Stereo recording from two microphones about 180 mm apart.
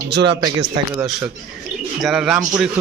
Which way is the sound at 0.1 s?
70° right (ahead or behind).